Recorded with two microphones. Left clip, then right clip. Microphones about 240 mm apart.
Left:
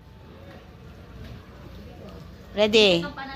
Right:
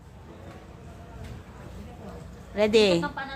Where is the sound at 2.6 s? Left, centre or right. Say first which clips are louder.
Left 2 dB; centre.